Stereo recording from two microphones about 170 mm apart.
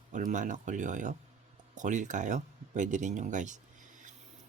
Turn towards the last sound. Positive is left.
turn(degrees=-45)  # may be behind; listen again after turning